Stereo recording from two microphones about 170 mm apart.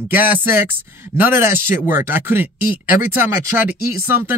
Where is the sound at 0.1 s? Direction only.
10° right (ahead or behind).